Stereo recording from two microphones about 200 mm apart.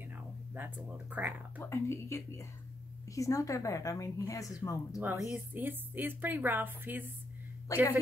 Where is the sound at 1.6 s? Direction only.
15° left (ahead or behind).